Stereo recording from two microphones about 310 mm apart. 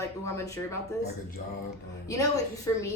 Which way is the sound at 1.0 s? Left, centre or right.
Left.